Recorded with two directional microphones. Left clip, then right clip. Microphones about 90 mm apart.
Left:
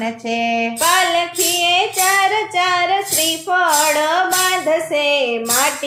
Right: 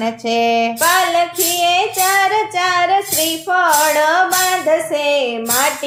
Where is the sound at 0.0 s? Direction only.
45° right (ahead or behind).